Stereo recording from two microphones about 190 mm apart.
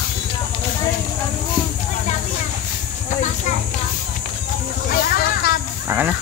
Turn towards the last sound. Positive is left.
turn(degrees=-10)  # may be behind; listen again after turning